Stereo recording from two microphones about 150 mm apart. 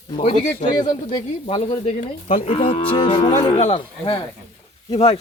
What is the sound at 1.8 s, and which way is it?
Speech, 50° left (ahead or behind).